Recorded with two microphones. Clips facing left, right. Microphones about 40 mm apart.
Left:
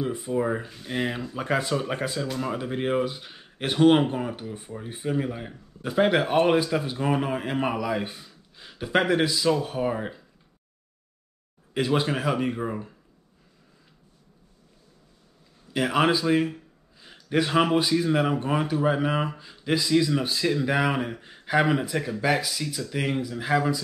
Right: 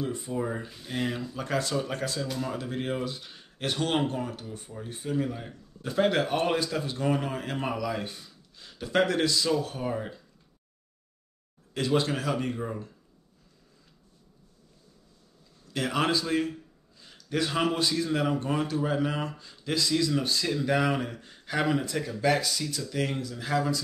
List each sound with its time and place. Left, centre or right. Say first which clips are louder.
0.0 s speech: left 5 dB; centre
11.7 s speech: left 2 dB; centre
15.7 s speech: left 5 dB; centre